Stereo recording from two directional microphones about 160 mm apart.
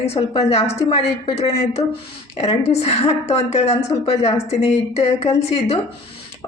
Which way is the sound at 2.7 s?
40° left (ahead or behind).